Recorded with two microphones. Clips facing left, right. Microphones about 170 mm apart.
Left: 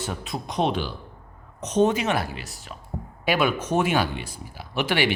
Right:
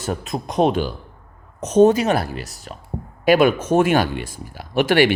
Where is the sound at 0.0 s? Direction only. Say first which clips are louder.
Right 6 dB; 45° right (ahead or behind).